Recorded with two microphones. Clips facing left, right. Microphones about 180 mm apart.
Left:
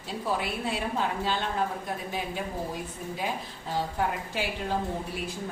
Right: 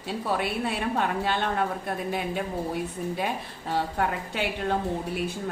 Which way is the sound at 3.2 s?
65° right (ahead or behind).